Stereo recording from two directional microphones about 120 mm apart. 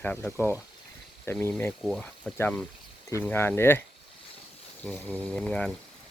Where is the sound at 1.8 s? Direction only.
Centre (ahead or behind).